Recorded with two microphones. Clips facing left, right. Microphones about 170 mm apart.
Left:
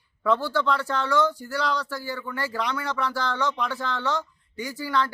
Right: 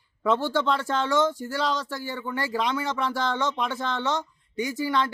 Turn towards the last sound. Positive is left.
turn(degrees=-20)  # may be behind; listen again after turning